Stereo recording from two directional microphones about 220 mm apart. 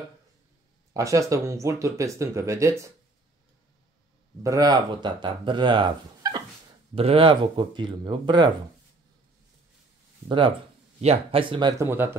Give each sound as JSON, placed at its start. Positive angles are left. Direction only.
{"t": 0.9, "sound": "speech", "side_deg": -15}
{"t": 4.4, "sound": "speech", "side_deg": -15}
{"t": 10.2, "sound": "speech", "side_deg": -20}